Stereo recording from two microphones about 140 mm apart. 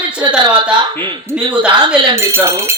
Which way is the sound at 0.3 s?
35° right (ahead or behind).